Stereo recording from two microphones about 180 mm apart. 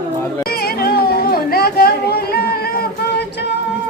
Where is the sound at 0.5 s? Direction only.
60° left (ahead or behind).